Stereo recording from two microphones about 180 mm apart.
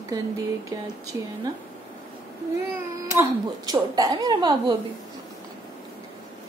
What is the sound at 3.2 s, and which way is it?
A woman's voice, 20° right (ahead or behind).